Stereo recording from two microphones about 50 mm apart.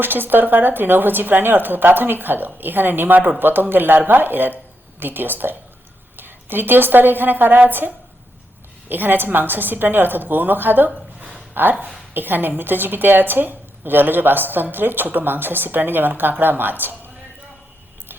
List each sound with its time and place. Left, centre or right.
0.0 s a woman's voice: right
3.2 s speech: right
3.4 s a woman's voice: right